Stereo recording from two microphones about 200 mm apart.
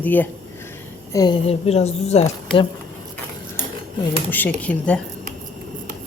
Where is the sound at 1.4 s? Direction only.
30° left (ahead or behind).